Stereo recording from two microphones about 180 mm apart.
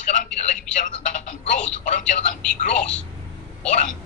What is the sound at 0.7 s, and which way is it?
Speech, 45° left (ahead or behind).